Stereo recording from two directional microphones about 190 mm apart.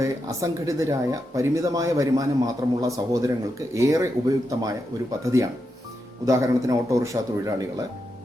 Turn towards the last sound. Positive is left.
turn(degrees=-15)  # may be behind; listen again after turning